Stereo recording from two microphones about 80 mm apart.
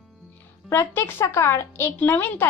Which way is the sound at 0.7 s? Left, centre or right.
Left.